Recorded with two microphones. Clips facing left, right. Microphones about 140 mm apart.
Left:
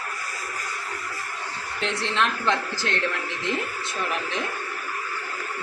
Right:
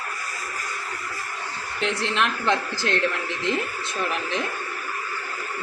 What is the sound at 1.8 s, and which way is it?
Speech, 15° right (ahead or behind).